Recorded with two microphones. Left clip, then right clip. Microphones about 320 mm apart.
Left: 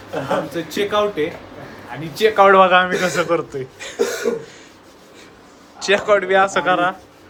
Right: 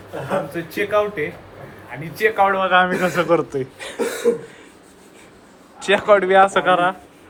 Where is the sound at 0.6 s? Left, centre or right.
Centre.